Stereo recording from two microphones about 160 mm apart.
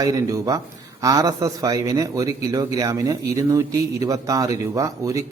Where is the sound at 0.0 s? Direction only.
20° right (ahead or behind).